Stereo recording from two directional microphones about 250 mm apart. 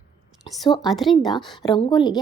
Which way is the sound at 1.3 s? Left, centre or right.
Centre.